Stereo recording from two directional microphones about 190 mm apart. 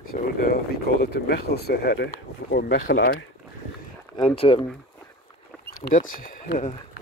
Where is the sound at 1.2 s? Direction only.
60° left (ahead or behind).